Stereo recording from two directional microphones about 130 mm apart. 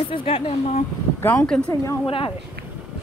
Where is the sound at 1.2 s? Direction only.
15° left (ahead or behind).